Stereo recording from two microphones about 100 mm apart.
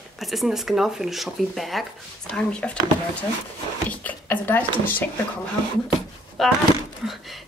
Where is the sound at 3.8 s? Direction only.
15° left (ahead or behind).